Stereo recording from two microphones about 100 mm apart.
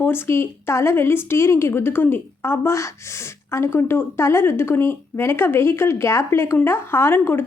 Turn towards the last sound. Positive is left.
turn(degrees=25)  # may be behind; listen again after turning